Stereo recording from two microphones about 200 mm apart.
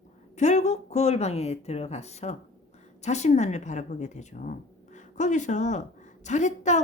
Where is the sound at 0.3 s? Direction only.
35° left (ahead or behind).